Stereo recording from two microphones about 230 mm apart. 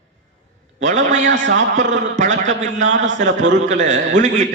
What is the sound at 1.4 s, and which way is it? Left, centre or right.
A man's voice, right.